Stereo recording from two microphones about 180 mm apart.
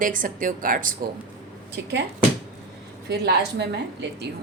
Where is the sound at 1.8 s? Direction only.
65° right (ahead or behind).